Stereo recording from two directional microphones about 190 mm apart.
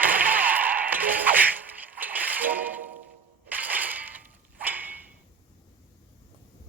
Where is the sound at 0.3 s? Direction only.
10° right (ahead or behind).